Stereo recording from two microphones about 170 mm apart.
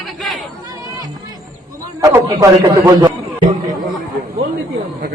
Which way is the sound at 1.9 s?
20° right (ahead or behind).